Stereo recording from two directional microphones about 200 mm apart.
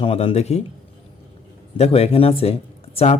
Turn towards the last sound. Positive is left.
turn(degrees=30)  # may be behind; listen again after turning